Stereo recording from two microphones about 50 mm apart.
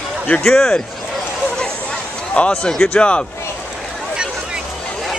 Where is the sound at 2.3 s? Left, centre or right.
Left.